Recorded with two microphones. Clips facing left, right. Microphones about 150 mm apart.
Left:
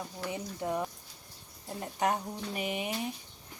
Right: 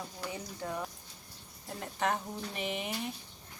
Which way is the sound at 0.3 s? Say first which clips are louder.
Left 5 dB; 20° left (ahead or behind).